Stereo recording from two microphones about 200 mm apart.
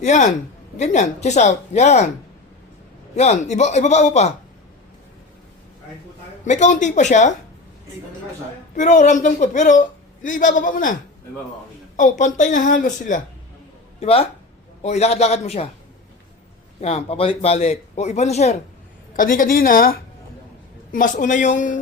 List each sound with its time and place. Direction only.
0.0 s a woman's voice: 35° left (ahead or behind)
3.2 s a woman's voice: 35° left (ahead or behind)
6.4 s a woman's voice: 40° left (ahead or behind)
8.7 s a woman's voice: 40° left (ahead or behind)
11.9 s a woman's voice: 40° left (ahead or behind)
14.0 s a woman's voice: 30° left (ahead or behind)
16.8 s a woman's voice: 30° left (ahead or behind)